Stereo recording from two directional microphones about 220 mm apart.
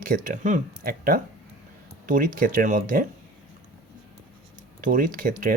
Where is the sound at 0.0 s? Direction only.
40° right (ahead or behind).